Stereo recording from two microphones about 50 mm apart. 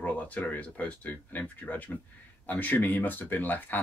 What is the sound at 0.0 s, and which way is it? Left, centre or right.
Speech, left.